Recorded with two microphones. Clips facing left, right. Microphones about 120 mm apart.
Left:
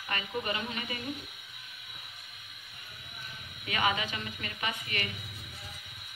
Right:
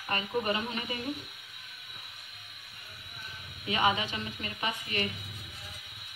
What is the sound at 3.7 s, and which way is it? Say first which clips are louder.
A woman's voice: right 2 dB; 25° right (ahead or behind).